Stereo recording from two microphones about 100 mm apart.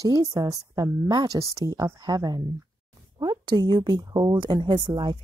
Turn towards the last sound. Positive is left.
turn(degrees=-50)  # may be behind; listen again after turning